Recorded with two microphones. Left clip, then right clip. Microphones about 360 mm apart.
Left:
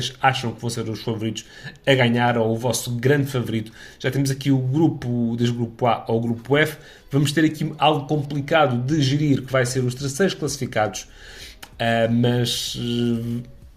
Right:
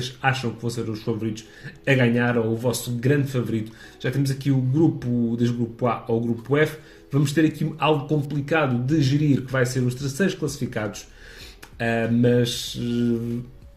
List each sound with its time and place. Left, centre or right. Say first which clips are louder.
0.0 s speech: left 4 dB; left